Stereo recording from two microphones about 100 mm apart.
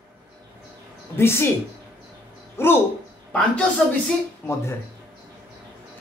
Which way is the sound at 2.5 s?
25° left (ahead or behind).